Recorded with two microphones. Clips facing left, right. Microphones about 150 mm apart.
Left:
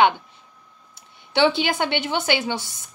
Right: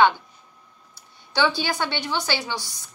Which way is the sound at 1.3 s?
25° left (ahead or behind).